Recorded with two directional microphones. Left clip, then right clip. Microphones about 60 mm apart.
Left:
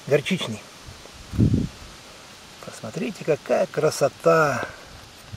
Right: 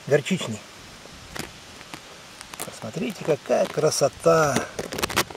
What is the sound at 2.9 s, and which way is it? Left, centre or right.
Speech, centre.